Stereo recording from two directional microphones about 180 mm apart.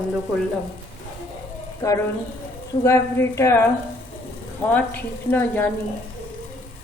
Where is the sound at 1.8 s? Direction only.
20° left (ahead or behind).